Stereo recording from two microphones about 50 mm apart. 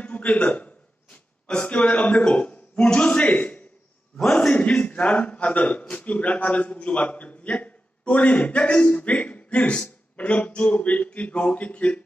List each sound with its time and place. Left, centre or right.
0.0 s a sound: left
2.2 s a man's voice: left
4.6 s a man's voice: left